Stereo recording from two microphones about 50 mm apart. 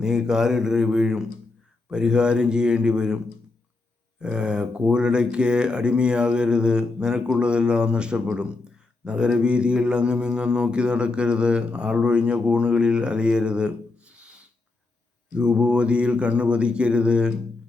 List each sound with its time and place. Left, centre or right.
0.0 s speech: centre
4.2 s speech: centre